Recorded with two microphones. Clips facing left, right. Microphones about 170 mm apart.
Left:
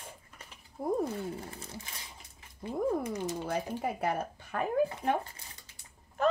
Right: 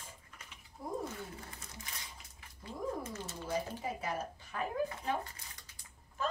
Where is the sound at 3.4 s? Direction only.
60° left (ahead or behind).